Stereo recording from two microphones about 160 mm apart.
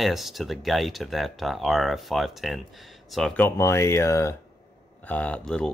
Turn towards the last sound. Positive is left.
turn(degrees=5)  # may be behind; listen again after turning